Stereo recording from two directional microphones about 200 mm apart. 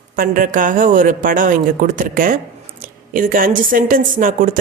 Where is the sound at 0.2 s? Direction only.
45° right (ahead or behind).